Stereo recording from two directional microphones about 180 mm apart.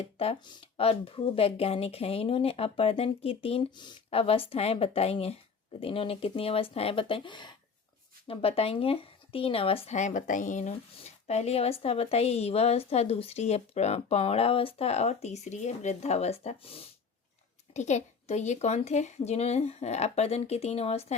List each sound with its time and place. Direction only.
0.0 s speech: 30° left (ahead or behind)